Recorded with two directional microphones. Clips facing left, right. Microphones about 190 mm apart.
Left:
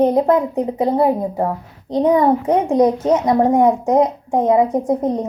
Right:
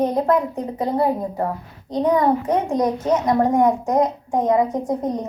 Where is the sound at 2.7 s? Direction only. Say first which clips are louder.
Left 7 dB; 25° left (ahead or behind).